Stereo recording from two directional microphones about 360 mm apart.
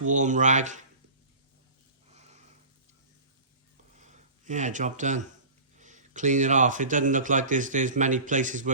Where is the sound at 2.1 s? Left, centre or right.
Centre.